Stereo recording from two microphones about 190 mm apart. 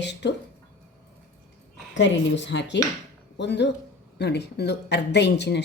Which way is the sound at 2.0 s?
70° left (ahead or behind).